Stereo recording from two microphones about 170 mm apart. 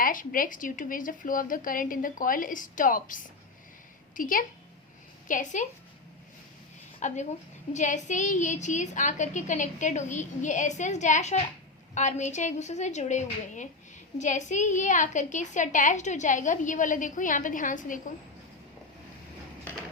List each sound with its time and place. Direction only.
0.0 s a woman's voice: 55° left (ahead or behind)
7.0 s a woman's voice: 45° left (ahead or behind)